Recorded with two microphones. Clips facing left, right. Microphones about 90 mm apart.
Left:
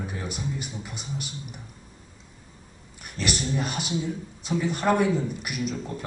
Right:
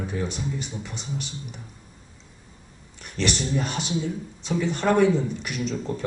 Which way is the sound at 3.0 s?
5° left (ahead or behind).